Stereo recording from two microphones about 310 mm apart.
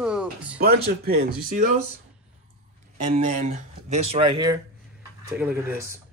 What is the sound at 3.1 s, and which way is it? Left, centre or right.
Speech, right.